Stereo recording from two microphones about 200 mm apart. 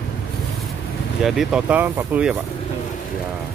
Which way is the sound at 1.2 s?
Centre (ahead or behind).